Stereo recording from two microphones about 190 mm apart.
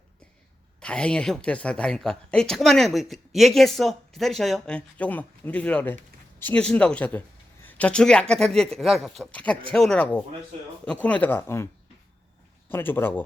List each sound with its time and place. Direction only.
0.8 s speech: 5° left (ahead or behind)